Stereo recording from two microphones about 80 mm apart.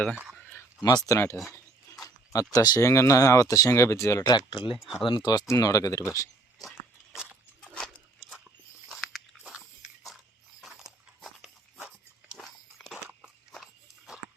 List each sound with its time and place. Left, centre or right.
0.9 s speech: left
1.5 s a sound: left
2.8 s speech: left
4.2 s speech: left
4.8 s speech: centre
5.0 s speech: left
5.5 s speech: left
6.6 s a sound: centre
7.6 s dog: centre
8.9 s biting: centre
9.4 s biting: centre
10.6 s dog: centre